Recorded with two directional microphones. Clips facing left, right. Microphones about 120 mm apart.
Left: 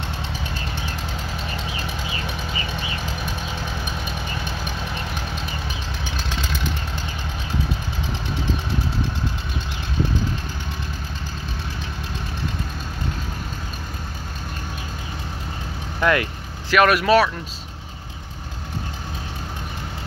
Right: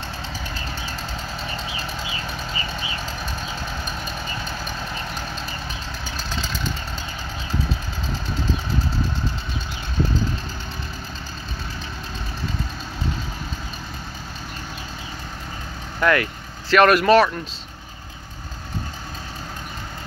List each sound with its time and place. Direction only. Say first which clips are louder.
16.0 s speech: even; 20° left (ahead or behind)
16.7 s speech: right 2 dB; 5° left (ahead or behind)